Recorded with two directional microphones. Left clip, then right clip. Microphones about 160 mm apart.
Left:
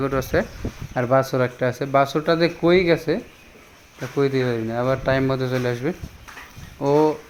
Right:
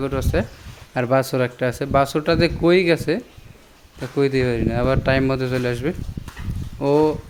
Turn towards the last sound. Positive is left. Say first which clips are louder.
# right 1 dB
turn(degrees=-30)  # may be behind; listen again after turning